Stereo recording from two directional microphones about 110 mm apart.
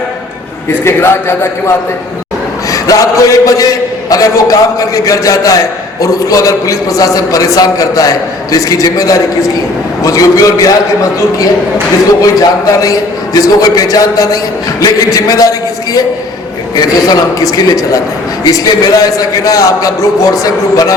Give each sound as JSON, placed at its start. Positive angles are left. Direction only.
{"t": 0.7, "sound": "a man's voice", "side_deg": 25}